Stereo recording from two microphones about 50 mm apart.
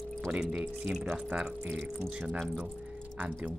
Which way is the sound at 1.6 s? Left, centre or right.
Centre.